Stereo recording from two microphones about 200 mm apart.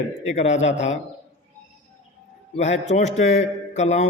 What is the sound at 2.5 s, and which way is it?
A man's voice, 35° left (ahead or behind).